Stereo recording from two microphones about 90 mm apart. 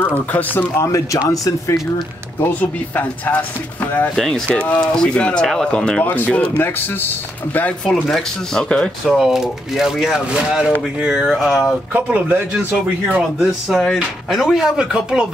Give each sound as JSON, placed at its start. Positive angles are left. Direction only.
{"t": 0.0, "sound": "speech", "side_deg": 20}
{"t": 0.8, "sound": "speech", "side_deg": 35}
{"t": 3.0, "sound": "speech", "side_deg": 15}
{"t": 4.6, "sound": "speech", "side_deg": 10}
{"t": 7.8, "sound": "speech", "side_deg": 5}
{"t": 9.0, "sound": "speech", "side_deg": -5}
{"t": 11.9, "sound": "speech", "side_deg": -20}
{"t": 13.2, "sound": "speech", "side_deg": -5}